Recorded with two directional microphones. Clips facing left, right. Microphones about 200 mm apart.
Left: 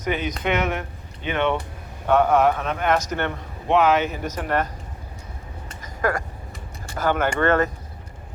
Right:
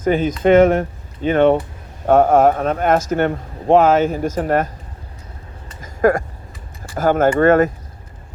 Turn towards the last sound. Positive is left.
turn(degrees=-45)  # may be behind; listen again after turning